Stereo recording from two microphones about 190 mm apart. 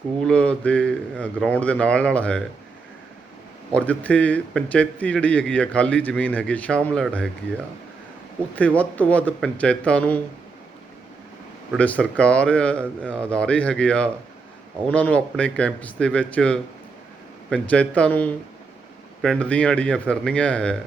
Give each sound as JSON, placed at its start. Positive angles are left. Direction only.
{"t": 0.2, "sound": "a man's voice", "side_deg": 5}
{"t": 3.7, "sound": "a man's voice", "side_deg": 5}
{"t": 8.5, "sound": "a man's voice", "side_deg": 10}
{"t": 11.8, "sound": "a man's voice", "side_deg": 5}